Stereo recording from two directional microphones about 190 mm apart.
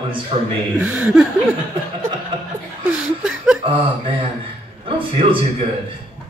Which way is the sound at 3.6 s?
25° right (ahead or behind).